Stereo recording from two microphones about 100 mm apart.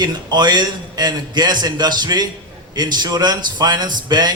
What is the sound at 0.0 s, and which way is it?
A man's voice, 45° right (ahead or behind).